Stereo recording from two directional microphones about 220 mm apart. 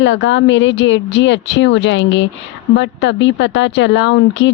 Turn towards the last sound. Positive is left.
turn(degrees=55)  # may be behind; listen again after turning